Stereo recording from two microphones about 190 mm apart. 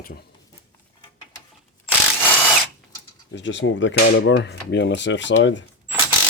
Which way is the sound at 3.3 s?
75° left (ahead or behind).